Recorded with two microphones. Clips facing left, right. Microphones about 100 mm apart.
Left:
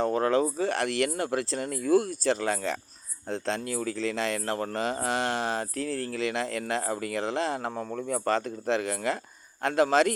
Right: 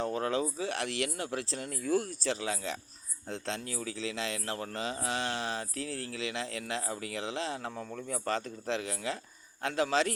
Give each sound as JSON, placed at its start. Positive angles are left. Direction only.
{"t": 0.0, "sound": "speech", "side_deg": 50}
{"t": 7.9, "sound": "speech", "side_deg": 75}
{"t": 8.2, "sound": "speech", "side_deg": 60}